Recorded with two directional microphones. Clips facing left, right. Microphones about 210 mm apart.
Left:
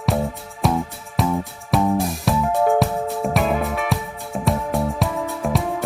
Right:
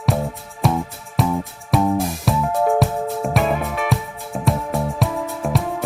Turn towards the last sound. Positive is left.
turn(degrees=0)  # may be behind; listen again after turning